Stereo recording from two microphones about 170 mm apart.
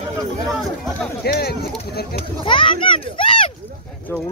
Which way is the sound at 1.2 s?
65° left (ahead or behind).